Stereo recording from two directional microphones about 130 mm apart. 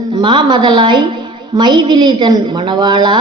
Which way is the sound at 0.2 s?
35° right (ahead or behind).